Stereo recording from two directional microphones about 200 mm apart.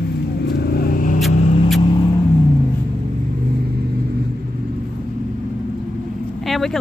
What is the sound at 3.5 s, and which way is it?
Vehicle, 50° right (ahead or behind).